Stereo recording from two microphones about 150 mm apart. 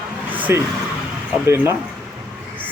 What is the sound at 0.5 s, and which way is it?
Speech, 15° right (ahead or behind).